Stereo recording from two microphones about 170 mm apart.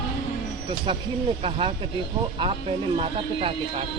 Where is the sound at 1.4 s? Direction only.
35° right (ahead or behind).